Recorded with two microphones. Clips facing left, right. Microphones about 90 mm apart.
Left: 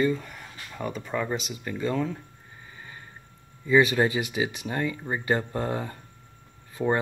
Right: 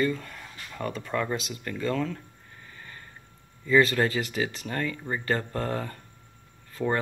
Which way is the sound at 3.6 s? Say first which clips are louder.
Left 1 dB; 15° left (ahead or behind).